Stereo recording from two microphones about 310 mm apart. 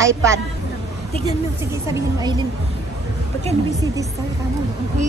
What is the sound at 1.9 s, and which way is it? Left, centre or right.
Speech, centre.